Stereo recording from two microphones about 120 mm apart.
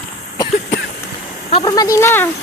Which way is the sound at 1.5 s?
35° left (ahead or behind).